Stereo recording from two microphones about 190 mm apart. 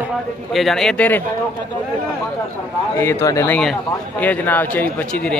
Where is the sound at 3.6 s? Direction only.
5° left (ahead or behind).